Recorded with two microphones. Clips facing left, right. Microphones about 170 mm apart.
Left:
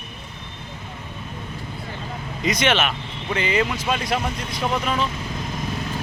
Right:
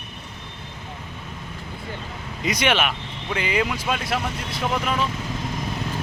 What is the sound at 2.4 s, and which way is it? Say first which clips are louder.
Speech: left 1 dB; 10° right (ahead or behind).